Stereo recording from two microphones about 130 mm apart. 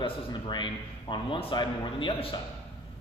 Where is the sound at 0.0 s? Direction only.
35° left (ahead or behind).